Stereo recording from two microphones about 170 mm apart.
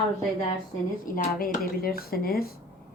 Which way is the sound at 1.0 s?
55° left (ahead or behind).